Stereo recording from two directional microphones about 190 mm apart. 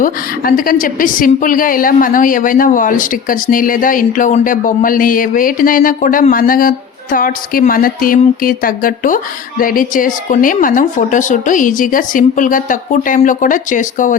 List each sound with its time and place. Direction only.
0.0 s a woman's voice: 50° left (ahead or behind)